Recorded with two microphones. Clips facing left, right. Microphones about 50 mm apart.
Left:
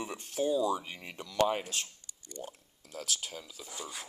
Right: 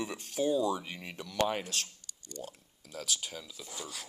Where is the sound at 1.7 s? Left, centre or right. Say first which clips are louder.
Right 1 dB; left.